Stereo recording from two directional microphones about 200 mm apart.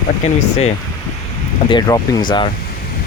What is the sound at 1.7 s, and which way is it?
Speech, 20° left (ahead or behind).